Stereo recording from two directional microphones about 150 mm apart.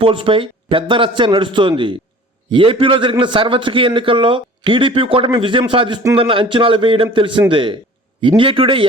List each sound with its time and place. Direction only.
0.0 s a man's voice: 35° right (ahead or behind)